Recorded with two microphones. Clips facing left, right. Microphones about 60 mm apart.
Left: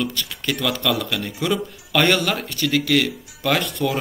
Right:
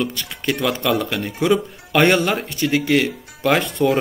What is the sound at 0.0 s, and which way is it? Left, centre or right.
Speech, right.